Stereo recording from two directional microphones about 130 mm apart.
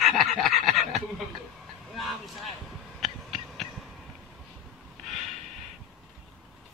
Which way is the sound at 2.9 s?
Centre (ahead or behind).